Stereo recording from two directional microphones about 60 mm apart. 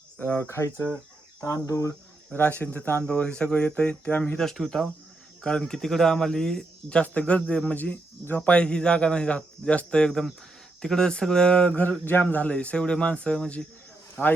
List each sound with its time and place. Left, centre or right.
0.2 s speech: left
0.4 s speech: left
1.6 s speech: left
2.6 s speech: left
3.0 s speech: centre
4.4 s speech: centre
7.0 s speech: left
10.1 s speech: centre
11.8 s speech: left
12.5 s speech: centre
14.2 s speech: right